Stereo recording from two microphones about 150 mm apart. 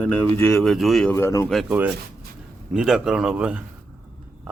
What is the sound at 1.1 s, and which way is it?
Speech, 20° left (ahead or behind).